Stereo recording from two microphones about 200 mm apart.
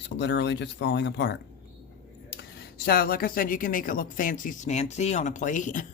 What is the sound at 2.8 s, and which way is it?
Speech, 50° left (ahead or behind).